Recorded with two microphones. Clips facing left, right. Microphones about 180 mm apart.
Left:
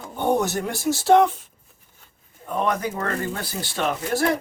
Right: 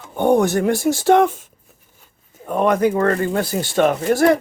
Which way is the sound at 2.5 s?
55° right (ahead or behind).